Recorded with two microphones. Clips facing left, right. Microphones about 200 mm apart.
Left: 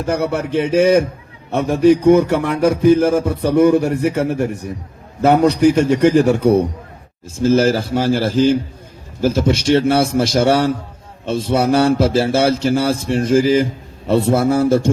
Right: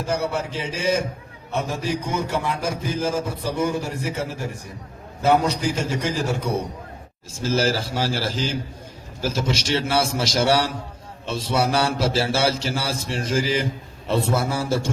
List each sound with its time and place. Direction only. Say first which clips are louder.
0.0 s a man's voice: left 6 dB; 60° left (ahead or behind)